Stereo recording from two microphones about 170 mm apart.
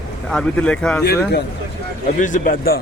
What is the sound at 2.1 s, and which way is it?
Speech, 50° left (ahead or behind).